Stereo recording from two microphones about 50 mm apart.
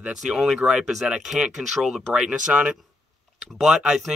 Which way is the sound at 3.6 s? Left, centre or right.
Centre.